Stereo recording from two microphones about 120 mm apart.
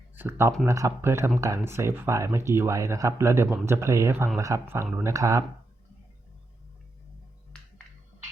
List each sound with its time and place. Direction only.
0.2 s speech: 20° right (ahead or behind)